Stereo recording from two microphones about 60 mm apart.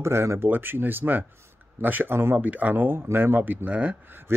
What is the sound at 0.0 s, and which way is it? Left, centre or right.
Speech, right.